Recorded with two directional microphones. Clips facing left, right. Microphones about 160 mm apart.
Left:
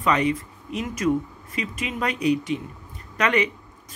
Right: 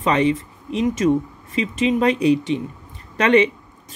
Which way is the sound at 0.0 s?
25° right (ahead or behind).